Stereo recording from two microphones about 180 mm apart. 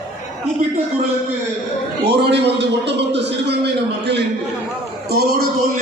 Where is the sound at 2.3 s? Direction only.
70° right (ahead or behind).